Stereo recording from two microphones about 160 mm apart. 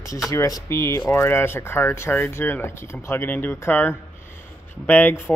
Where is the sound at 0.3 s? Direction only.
20° left (ahead or behind).